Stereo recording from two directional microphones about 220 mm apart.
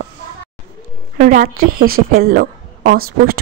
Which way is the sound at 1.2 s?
35° right (ahead or behind).